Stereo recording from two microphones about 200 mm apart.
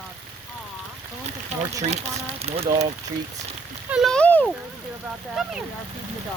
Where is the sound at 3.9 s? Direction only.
Centre (ahead or behind).